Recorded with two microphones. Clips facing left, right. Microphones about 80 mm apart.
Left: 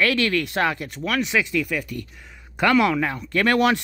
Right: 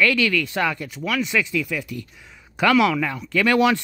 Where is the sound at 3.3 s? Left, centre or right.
Left.